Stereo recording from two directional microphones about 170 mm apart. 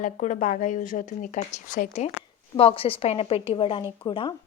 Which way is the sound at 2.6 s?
35° left (ahead or behind).